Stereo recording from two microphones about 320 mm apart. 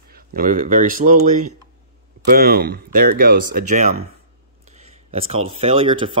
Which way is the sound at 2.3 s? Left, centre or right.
Right.